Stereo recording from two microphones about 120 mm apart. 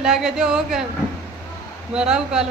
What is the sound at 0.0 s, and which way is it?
Speech, 5° right (ahead or behind).